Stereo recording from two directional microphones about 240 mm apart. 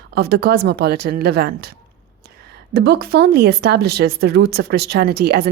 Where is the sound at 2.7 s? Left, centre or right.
Right.